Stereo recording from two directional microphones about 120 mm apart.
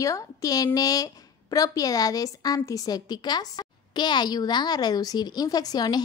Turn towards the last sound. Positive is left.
turn(degrees=35)  # may be behind; listen again after turning